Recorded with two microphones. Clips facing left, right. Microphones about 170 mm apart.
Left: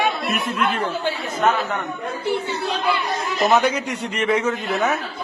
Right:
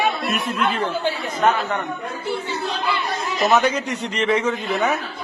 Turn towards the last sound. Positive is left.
turn(degrees=5)  # may be behind; listen again after turning